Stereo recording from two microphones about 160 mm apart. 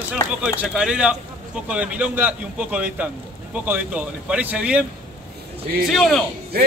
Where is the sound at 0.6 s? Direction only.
5° right (ahead or behind).